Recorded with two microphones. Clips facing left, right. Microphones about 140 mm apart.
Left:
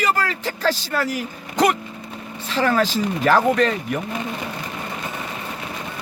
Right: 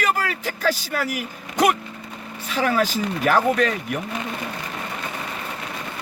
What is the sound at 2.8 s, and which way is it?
Speech, 10° right (ahead or behind).